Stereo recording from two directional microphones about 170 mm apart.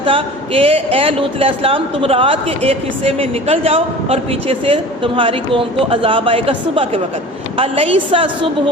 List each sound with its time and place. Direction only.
0.0 s a woman's voice: 30° right (ahead or behind)